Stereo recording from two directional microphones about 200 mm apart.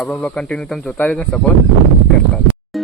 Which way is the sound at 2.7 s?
Centre (ahead or behind).